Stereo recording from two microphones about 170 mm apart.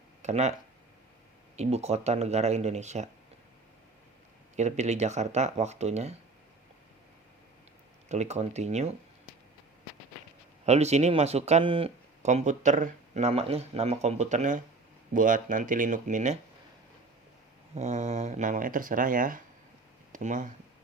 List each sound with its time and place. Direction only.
0.2 s speech: 40° right (ahead or behind)
1.5 s speech: 40° right (ahead or behind)
4.5 s speech: 40° right (ahead or behind)
8.1 s speech: 40° right (ahead or behind)
10.7 s speech: 40° right (ahead or behind)
17.7 s speech: 45° right (ahead or behind)